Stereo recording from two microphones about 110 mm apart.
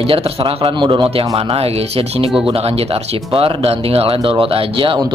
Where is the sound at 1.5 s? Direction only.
65° right (ahead or behind).